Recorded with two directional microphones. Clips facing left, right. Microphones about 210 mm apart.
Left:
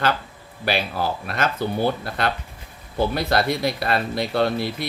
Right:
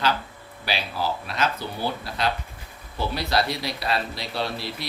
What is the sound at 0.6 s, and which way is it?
Speech, 50° left (ahead or behind).